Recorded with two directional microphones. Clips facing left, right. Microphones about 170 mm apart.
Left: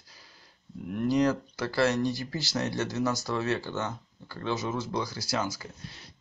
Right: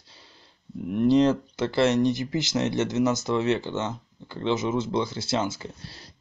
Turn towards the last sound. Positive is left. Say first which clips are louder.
# right 5 dB
turn(degrees=-35)  # may be behind; listen again after turning